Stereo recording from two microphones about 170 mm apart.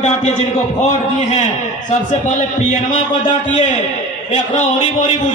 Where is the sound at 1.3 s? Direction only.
40° left (ahead or behind).